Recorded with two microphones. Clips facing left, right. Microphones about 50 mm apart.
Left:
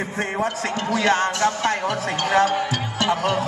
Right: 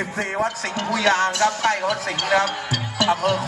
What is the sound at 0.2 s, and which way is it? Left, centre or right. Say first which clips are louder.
Speech: even; left.